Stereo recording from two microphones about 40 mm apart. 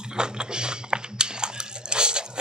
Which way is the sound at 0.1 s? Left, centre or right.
Right.